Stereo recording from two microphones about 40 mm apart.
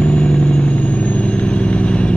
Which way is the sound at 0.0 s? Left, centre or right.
Left.